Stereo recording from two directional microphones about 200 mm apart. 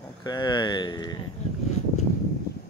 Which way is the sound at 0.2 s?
20° left (ahead or behind).